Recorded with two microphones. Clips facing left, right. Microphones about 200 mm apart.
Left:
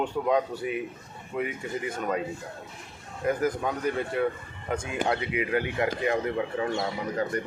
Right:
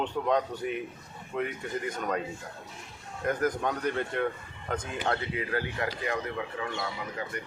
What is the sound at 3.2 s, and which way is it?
Speech, 5° left (ahead or behind).